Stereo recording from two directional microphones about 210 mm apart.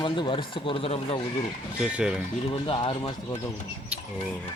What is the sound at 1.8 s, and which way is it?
Speech, 5° right (ahead or behind).